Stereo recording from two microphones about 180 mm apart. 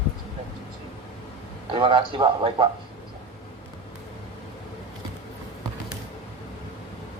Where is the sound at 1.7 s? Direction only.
25° right (ahead or behind).